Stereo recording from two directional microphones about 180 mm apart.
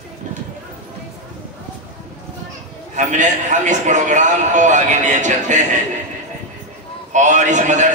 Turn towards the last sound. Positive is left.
turn(degrees=-40)  # may be behind; listen again after turning